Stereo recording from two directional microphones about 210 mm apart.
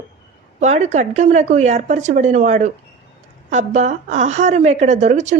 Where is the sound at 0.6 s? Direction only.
35° right (ahead or behind).